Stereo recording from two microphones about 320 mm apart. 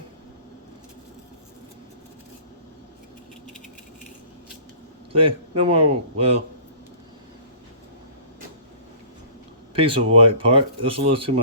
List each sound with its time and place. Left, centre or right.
5.1 s a man's voice: centre
9.7 s a man's voice: centre